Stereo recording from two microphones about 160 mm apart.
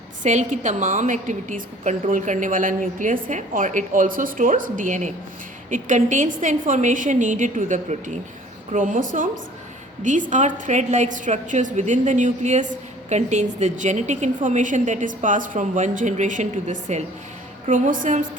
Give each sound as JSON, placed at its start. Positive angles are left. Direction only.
{"t": 0.2, "sound": "a woman's voice", "side_deg": -50}